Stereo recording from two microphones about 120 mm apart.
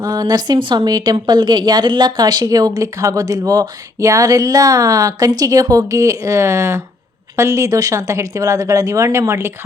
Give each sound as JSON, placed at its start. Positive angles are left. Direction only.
{"t": 0.0, "sound": "speech", "side_deg": -30}